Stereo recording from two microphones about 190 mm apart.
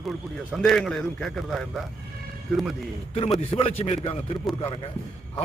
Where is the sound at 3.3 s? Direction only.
30° left (ahead or behind).